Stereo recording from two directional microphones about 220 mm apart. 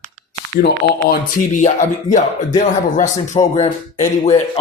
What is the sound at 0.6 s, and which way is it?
Speech, 40° left (ahead or behind).